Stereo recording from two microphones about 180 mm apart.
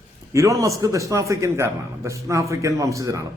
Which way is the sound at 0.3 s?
15° right (ahead or behind).